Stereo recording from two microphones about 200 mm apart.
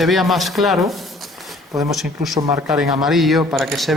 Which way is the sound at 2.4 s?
15° right (ahead or behind).